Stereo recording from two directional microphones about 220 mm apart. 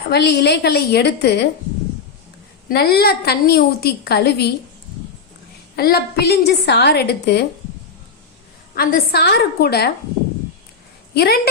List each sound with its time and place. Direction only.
0.1 s a woman's voice: 50° left (ahead or behind)
2.6 s a woman's voice: 45° left (ahead or behind)
5.7 s a woman's voice: 45° left (ahead or behind)
8.7 s a woman's voice: 40° left (ahead or behind)
11.1 s a woman's voice: 45° left (ahead or behind)